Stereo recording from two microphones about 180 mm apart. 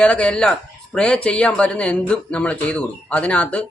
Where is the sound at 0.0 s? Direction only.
5° left (ahead or behind).